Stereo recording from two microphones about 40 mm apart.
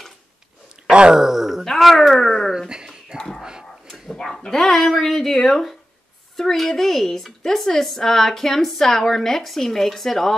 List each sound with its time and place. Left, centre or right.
0.8 s groan: right
1.6 s speech: centre
3.2 s dog: centre
4.5 s a woman's voice: centre